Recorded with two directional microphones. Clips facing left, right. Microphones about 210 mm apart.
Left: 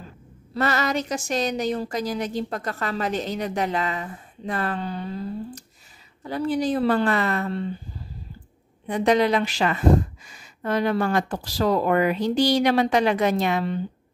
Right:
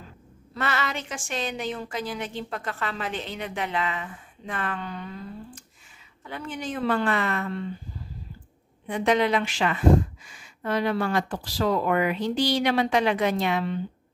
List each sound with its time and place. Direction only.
0.6 s speech: 40° left (ahead or behind)
8.8 s speech: 35° left (ahead or behind)